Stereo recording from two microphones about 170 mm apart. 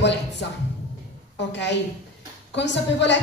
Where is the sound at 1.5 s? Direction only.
90° left.